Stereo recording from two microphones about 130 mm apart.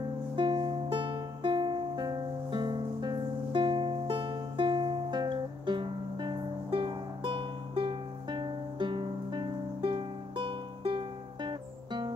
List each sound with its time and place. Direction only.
0.4 s music: 35° right (ahead or behind)